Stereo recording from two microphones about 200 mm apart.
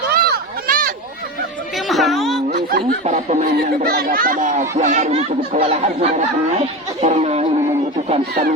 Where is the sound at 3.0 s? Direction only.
35° right (ahead or behind).